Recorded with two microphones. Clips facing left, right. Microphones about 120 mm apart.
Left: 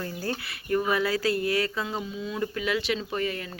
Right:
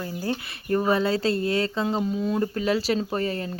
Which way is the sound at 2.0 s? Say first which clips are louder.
Right 6 dB; 40° right (ahead or behind).